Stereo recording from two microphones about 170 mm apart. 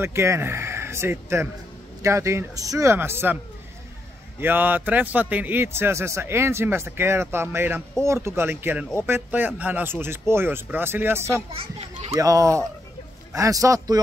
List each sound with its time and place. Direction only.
0.0 s a man's voice: 15° right (ahead or behind)
4.4 s a man's voice: 10° right (ahead or behind)